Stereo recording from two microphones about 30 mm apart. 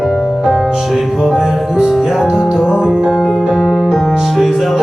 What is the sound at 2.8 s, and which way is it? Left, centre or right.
Music, right.